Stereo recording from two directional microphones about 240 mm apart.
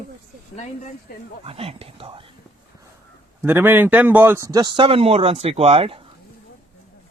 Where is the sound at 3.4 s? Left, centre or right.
Centre.